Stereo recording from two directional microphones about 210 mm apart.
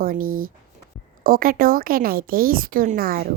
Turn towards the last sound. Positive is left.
turn(degrees=-45)  # may be behind; listen again after turning